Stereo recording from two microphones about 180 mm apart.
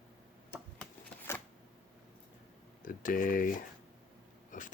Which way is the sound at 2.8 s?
50° left (ahead or behind).